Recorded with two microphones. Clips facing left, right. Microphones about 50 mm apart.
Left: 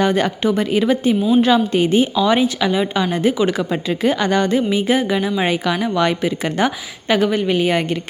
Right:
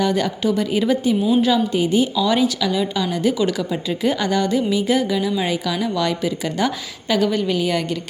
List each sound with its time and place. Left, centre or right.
0.0 s a woman's voice: left
2.0 s a woman's voice: left
3.7 s a woman's voice: left